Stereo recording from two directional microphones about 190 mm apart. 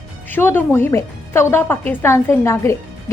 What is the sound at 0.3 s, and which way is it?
A woman's voice, 10° left (ahead or behind).